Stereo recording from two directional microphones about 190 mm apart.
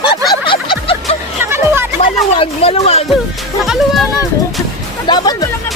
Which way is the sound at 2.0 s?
30° left (ahead or behind).